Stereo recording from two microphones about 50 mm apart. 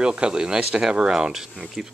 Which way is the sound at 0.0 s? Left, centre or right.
Centre.